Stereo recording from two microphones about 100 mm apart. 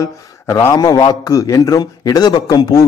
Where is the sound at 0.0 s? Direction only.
30° left (ahead or behind).